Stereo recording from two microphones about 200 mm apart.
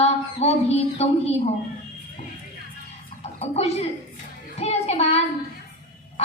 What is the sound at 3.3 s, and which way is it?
A woman's voice, 30° left (ahead or behind).